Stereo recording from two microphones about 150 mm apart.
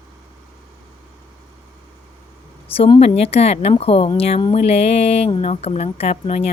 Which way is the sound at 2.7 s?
40° left (ahead or behind).